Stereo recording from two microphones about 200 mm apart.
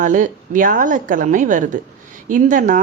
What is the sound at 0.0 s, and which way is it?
Speech, 40° right (ahead or behind).